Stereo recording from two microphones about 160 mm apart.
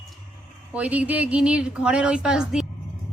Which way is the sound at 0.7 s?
10° right (ahead or behind).